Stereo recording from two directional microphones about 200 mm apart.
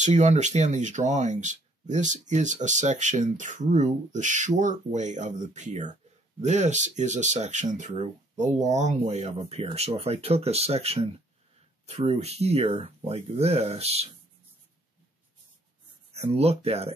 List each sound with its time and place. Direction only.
0.0 s speech: 35° right (ahead or behind)
16.2 s speech: 30° right (ahead or behind)